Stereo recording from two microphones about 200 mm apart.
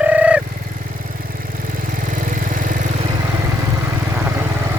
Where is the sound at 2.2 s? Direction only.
40° right (ahead or behind).